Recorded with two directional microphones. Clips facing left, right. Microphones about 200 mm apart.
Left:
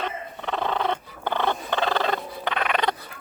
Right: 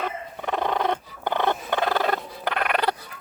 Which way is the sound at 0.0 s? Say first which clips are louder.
Right 1 dB; 10° right (ahead or behind).